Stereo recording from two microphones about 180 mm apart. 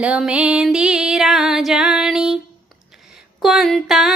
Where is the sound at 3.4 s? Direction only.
Centre (ahead or behind).